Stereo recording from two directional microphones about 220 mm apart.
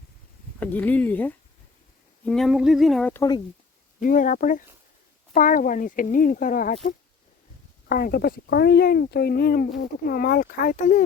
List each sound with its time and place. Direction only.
0.6 s speech: 10° left (ahead or behind)
4.0 s speech: 35° left (ahead or behind)
7.9 s speech: 45° left (ahead or behind)